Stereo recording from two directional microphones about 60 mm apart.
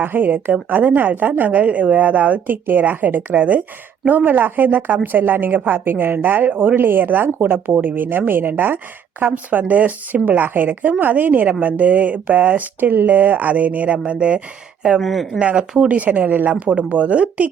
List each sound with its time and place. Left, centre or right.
0.0 s a woman's voice: right
15.0 s speech: centre
15.4 s a woman's voice: centre